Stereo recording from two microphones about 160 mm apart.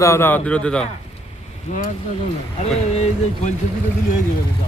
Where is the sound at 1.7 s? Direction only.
45° left (ahead or behind).